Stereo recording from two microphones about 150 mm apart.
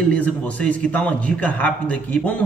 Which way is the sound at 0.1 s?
10° left (ahead or behind).